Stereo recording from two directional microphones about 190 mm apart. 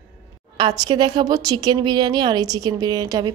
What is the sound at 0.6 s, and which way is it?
A woman's voice, 25° right (ahead or behind).